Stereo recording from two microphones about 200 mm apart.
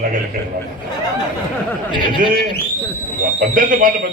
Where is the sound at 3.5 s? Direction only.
45° right (ahead or behind).